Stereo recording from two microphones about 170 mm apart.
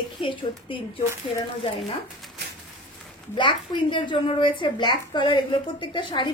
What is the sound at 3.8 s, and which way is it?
A woman's voice, 30° left (ahead or behind).